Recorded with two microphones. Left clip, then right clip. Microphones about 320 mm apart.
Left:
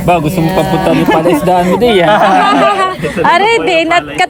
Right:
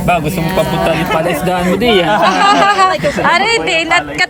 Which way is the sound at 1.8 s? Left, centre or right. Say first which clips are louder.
Left 2 dB; centre.